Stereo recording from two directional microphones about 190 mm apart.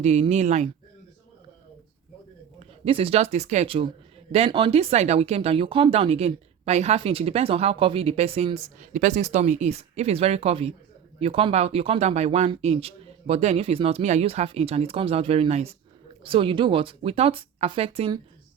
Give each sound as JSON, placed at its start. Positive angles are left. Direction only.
{"t": 0.0, "sound": "speech", "side_deg": -35}
{"t": 2.8, "sound": "speech", "side_deg": -30}